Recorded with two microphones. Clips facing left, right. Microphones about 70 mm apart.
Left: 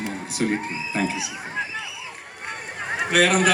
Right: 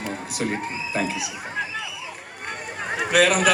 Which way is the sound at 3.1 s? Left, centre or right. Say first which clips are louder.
Even; left.